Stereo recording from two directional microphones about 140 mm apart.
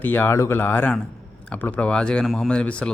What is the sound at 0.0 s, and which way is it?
Speech, 15° left (ahead or behind).